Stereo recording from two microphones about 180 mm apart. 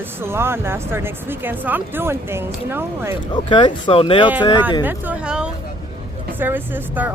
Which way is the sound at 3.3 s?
25° left (ahead or behind).